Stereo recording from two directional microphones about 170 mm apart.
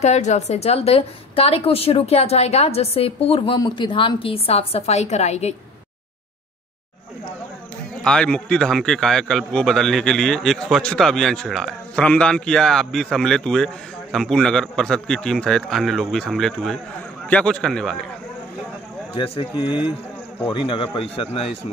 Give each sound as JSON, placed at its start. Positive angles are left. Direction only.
{"t": 0.0, "sound": "a woman's voice", "side_deg": 40}
{"t": 8.0, "sound": "a man's voice", "side_deg": 5}
{"t": 19.1, "sound": "a woman's voice", "side_deg": 35}